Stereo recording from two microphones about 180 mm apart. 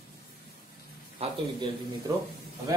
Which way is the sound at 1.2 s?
35° right (ahead or behind).